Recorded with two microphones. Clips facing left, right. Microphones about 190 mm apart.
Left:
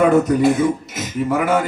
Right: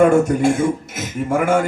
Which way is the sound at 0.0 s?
50° right (ahead or behind).